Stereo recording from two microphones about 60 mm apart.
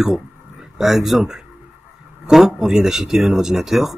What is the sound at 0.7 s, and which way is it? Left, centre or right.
Speech, centre.